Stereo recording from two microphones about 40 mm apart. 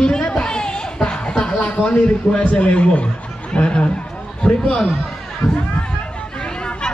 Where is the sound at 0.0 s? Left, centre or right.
Left.